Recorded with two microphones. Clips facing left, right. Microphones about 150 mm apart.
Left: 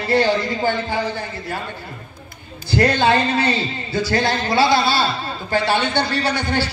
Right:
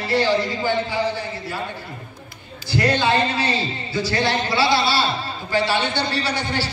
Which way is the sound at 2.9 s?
50° left (ahead or behind).